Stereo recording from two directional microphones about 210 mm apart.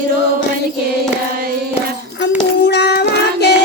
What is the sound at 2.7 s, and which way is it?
Child singing, 50° left (ahead or behind).